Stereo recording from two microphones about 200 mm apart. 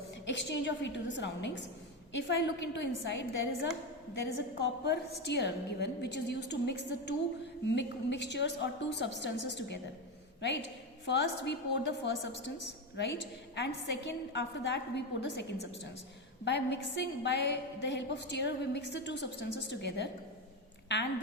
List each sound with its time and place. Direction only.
0.3 s a woman's voice: 60° left (ahead or behind)
11.0 s a woman's voice: 60° left (ahead or behind)
13.6 s a woman's voice: 60° left (ahead or behind)